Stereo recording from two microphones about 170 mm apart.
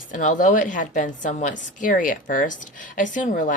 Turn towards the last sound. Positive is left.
turn(degrees=50)  # may be behind; listen again after turning